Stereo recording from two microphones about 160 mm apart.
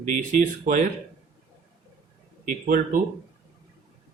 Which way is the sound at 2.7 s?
60° right (ahead or behind).